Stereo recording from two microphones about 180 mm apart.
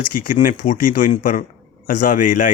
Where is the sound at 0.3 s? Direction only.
45° left (ahead or behind).